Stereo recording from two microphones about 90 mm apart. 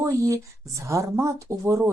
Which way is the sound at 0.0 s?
35° right (ahead or behind).